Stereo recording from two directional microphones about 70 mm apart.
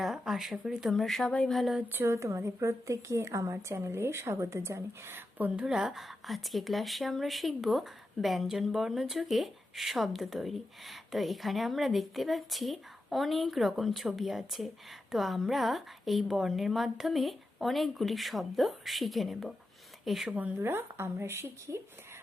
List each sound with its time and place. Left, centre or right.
0.0 s speech: centre
1.9 s a woman's voice: right
5.5 s speech: centre
20.3 s a woman's voice: right